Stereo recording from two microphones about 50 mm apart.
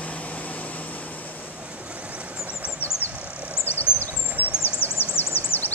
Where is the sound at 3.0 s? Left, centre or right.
Right.